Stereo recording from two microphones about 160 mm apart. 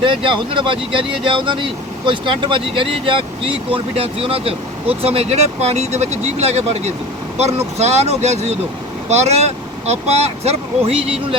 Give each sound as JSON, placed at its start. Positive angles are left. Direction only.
{"t": 0.0, "sound": "speech", "side_deg": -30}